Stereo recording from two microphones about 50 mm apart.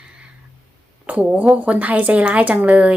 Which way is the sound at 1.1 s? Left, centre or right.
Right.